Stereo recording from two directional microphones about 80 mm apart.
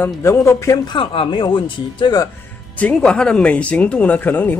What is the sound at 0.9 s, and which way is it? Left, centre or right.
Speech, left.